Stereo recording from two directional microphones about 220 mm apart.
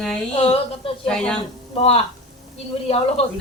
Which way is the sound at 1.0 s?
5° left (ahead or behind).